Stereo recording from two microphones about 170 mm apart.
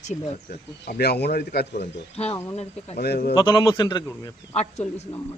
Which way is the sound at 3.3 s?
25° left (ahead or behind).